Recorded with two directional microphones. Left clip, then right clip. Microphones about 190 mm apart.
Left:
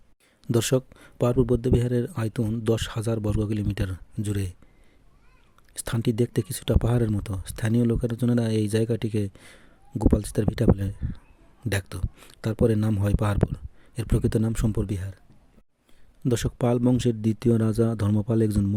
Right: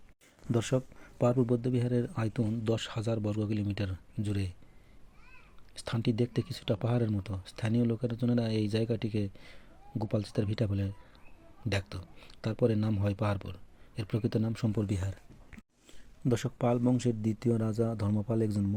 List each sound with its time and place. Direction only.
0.4 s speech: 60° left (ahead or behind)
5.7 s speech: 65° left (ahead or behind); by 15.0 s 45° left (ahead or behind)
16.2 s speech: 55° left (ahead or behind)